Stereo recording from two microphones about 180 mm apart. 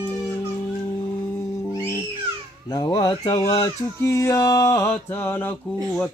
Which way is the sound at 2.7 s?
20° left (ahead or behind).